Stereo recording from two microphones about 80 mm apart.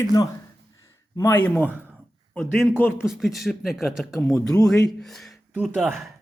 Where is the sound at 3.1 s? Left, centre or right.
Centre.